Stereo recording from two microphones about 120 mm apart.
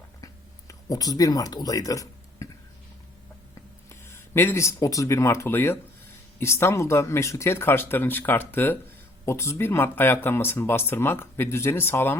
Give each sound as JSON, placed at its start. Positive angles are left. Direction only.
{"t": 0.7, "sound": "speech", "side_deg": 30}
{"t": 3.8, "sound": "speech", "side_deg": 20}